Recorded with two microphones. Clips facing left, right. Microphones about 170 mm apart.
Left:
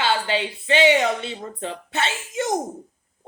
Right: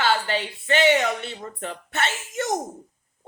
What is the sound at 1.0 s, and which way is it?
Speech, 20° left (ahead or behind).